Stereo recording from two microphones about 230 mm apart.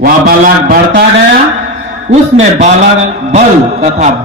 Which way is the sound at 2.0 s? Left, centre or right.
Right.